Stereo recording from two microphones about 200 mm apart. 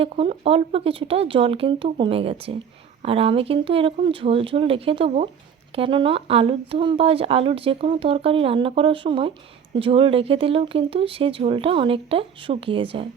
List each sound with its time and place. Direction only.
0.0 s speech: 30° right (ahead or behind)